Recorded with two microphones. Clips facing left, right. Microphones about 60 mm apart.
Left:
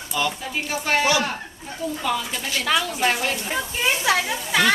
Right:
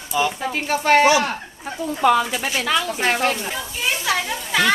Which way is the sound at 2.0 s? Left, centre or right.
Right.